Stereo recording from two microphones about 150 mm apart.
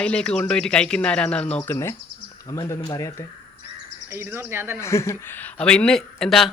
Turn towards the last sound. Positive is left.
turn(degrees=0)  # may be behind; listen again after turning